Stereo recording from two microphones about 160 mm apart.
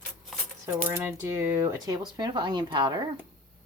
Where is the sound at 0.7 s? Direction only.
15° right (ahead or behind); by 2.9 s 30° right (ahead or behind).